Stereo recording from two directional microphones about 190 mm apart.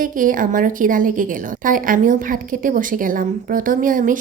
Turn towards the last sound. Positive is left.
turn(degrees=-45)  # may be behind; listen again after turning